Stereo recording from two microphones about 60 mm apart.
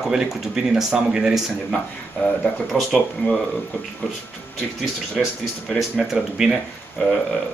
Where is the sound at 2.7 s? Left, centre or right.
Centre.